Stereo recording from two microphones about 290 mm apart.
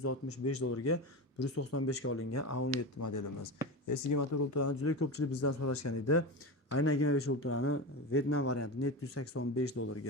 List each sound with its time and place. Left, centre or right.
0.0 s a man's voice: left
3.0 s speech: left
5.4 s speech: left
6.7 s a man's voice: left